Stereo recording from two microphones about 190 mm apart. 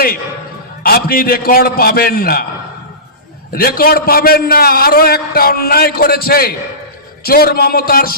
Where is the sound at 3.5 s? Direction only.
50° left (ahead or behind).